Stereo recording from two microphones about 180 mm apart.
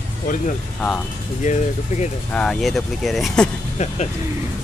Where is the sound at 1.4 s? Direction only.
40° left (ahead or behind).